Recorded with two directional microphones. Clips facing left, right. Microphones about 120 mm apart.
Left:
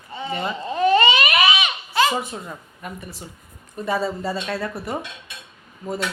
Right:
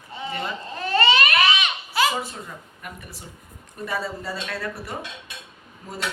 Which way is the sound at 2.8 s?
30° left (ahead or behind).